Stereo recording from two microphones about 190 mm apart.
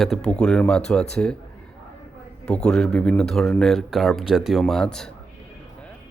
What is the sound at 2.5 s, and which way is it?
Speech, 5° left (ahead or behind).